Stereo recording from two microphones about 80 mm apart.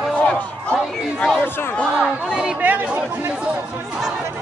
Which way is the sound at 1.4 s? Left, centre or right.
Left.